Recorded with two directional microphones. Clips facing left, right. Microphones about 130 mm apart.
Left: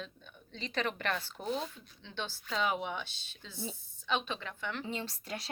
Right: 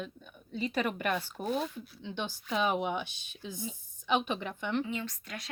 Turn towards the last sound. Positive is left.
turn(degrees=30)  # may be behind; listen again after turning